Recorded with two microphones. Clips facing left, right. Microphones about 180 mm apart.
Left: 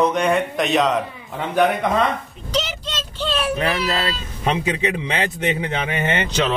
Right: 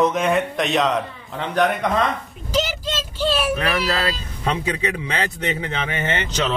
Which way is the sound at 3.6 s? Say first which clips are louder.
Even; 20° left (ahead or behind).